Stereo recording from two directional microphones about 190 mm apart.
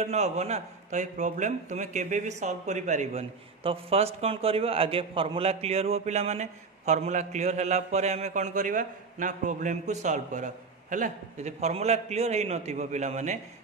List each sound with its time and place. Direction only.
0.0 s a man's voice: 35° right (ahead or behind)